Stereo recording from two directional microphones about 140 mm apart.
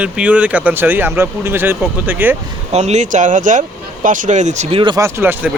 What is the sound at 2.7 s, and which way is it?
Speech, 55° right (ahead or behind).